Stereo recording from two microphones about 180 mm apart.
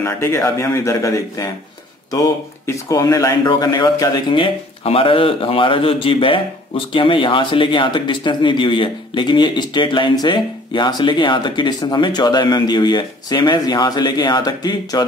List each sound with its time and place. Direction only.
0.0 s speech: 15° left (ahead or behind)